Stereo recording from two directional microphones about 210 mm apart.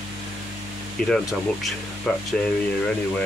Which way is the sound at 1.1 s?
Centre (ahead or behind).